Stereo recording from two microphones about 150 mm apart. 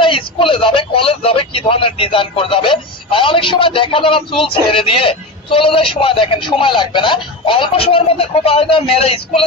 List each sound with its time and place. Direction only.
0.0 s speech: 35° left (ahead or behind)